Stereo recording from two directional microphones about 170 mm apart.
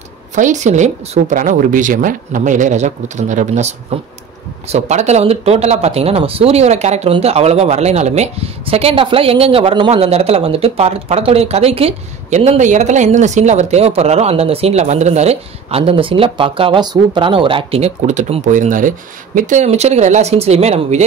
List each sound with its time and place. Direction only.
0.4 s speech: 45° right (ahead or behind)